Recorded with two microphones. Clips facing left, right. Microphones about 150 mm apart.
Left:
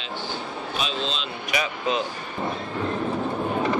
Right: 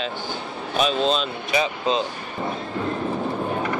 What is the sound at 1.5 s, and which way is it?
Speech, 25° right (ahead or behind).